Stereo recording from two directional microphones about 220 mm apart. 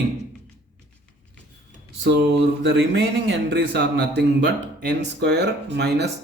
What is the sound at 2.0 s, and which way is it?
Speech, 50° right (ahead or behind).